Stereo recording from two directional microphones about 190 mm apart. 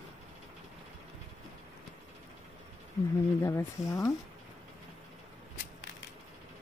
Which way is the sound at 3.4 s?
15° left (ahead or behind).